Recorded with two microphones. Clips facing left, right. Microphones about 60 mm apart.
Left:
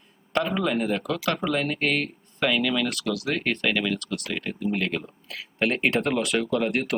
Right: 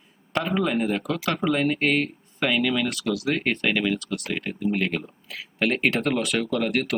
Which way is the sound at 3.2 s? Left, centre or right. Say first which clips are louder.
Right 1 dB; centre.